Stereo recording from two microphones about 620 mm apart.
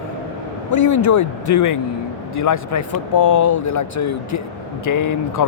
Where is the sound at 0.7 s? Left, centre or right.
Left.